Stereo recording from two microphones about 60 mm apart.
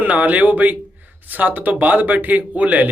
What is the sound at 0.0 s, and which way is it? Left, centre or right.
Speech, right.